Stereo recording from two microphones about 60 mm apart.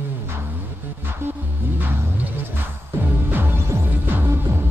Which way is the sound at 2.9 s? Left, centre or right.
Right.